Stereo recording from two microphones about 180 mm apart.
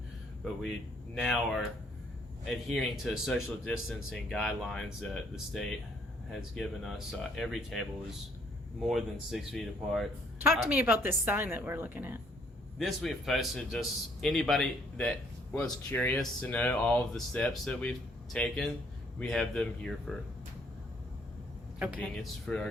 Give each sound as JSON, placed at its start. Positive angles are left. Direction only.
{"t": 1.1, "sound": "speech", "side_deg": 0}
{"t": 8.9, "sound": "speech", "side_deg": 0}
{"t": 10.4, "sound": "a woman's voice", "side_deg": -15}
{"t": 12.8, "sound": "speech", "side_deg": 0}
{"t": 21.9, "sound": "speech", "side_deg": 5}